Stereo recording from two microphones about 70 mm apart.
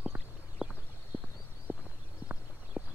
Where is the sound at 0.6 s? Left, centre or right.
Centre.